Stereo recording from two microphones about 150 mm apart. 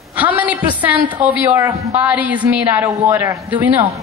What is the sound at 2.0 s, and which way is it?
A woman's voice, 10° right (ahead or behind).